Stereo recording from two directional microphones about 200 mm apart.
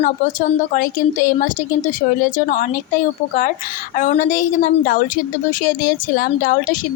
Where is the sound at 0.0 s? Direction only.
40° left (ahead or behind).